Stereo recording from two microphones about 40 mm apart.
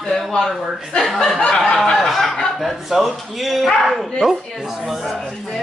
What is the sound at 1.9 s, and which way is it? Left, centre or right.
Speech, centre.